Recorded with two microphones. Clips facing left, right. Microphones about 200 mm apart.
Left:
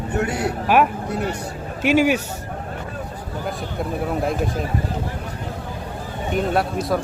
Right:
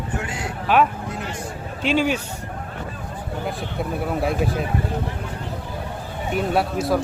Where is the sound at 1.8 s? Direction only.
10° left (ahead or behind).